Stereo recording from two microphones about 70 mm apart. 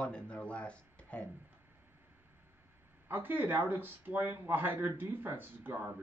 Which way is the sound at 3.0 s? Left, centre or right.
Right.